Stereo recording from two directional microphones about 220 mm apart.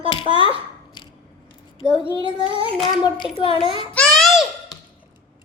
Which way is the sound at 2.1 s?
20° left (ahead or behind).